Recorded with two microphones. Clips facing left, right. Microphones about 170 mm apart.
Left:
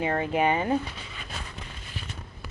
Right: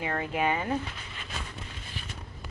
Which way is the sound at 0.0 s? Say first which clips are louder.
Left 4 dB; 25° left (ahead or behind).